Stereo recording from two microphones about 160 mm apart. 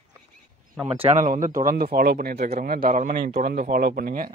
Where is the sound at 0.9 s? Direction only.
45° right (ahead or behind); by 3.4 s 75° right (ahead or behind).